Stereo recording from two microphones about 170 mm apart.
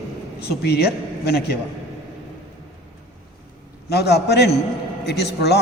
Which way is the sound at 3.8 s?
70° left (ahead or behind).